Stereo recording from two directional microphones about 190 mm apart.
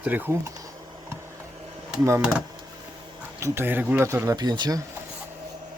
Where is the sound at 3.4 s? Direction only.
10° right (ahead or behind).